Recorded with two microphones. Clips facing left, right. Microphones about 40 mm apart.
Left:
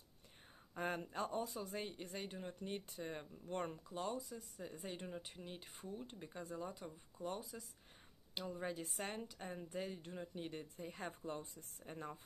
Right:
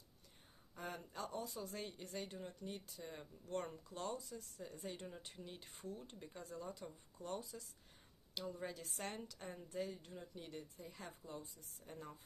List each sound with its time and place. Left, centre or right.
0.7 s speech: left
1.4 s speech: centre
2.6 s speech: left
9.0 s speech: centre; by 12.2 s left